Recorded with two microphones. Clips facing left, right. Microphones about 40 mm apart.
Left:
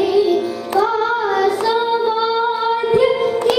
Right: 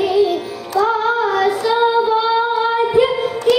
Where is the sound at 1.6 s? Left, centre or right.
Centre.